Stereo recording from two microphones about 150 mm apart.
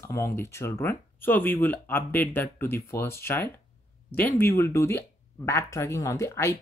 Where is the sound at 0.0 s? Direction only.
20° left (ahead or behind).